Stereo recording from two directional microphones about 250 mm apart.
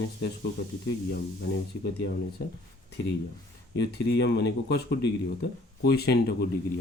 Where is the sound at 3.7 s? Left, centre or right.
Left.